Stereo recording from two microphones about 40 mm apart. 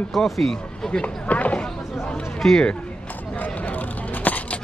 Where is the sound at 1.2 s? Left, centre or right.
Left.